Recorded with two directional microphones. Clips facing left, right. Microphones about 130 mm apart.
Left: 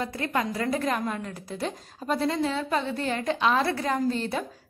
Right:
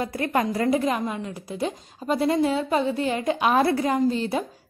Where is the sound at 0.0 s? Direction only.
25° right (ahead or behind).